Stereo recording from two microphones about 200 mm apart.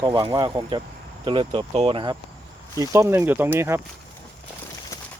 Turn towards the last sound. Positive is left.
turn(degrees=-10)  # may be behind; listen again after turning